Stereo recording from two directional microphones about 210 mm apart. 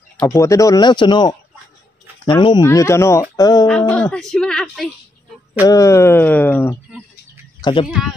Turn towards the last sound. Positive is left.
turn(degrees=25)  # may be behind; listen again after turning